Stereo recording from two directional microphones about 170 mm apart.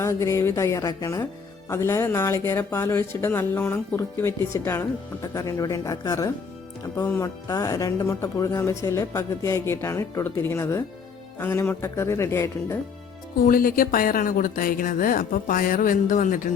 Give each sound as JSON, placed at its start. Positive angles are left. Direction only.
{"t": 0.0, "sound": "speech", "side_deg": 20}
{"t": 13.4, "sound": "speech", "side_deg": 55}